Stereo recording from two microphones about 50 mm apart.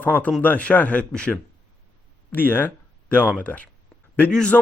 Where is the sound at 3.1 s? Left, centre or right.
Left.